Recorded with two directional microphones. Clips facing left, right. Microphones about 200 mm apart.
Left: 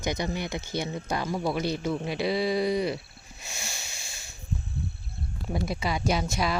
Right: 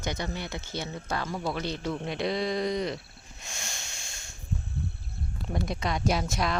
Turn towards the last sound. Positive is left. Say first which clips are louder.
# left 1 dB
turn(degrees=0)  # may be behind; listen again after turning